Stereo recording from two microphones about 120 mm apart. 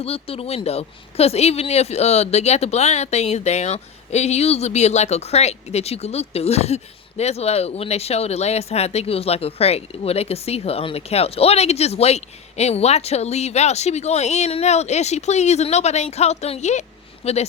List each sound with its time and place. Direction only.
0.0 s speech: 55° left (ahead or behind); by 16.8 s 70° left (ahead or behind)
17.2 s speech: 60° left (ahead or behind)